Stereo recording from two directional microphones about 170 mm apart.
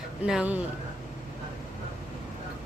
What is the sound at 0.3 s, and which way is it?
Speech, 5° right (ahead or behind).